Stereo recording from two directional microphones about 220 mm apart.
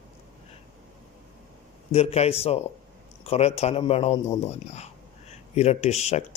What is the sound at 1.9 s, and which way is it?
A man's voice, 30° left (ahead or behind).